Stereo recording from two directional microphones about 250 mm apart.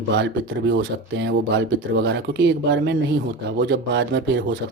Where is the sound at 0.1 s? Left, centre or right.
Right.